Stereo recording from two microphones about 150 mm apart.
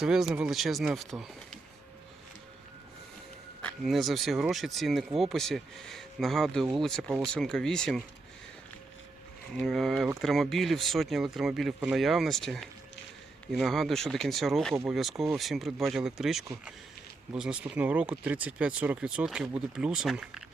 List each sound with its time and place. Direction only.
0.0 s speech: 5° right (ahead or behind)
3.8 s speech: centre (ahead or behind)
9.5 s speech: centre (ahead or behind)